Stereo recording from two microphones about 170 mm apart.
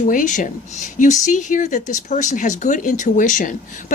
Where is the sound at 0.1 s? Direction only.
50° left (ahead or behind).